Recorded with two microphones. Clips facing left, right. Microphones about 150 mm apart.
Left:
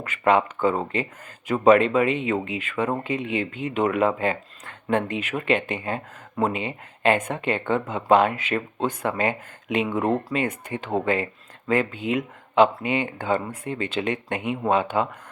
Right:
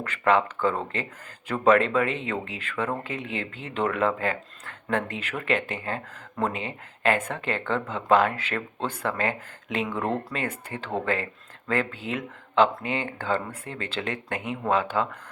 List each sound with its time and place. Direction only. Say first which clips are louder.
0.0 s speech: left 2 dB; 15° left (ahead or behind)